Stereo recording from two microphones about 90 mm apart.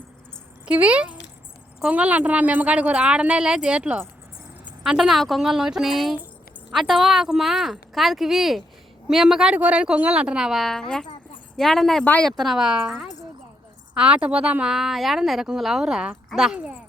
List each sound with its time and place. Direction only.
0.6 s a woman's voice: 15° right (ahead or behind)